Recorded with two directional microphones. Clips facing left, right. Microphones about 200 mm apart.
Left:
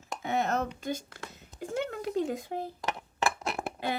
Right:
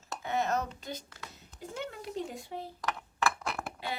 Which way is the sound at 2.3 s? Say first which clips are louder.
Left 9 dB; 90° left.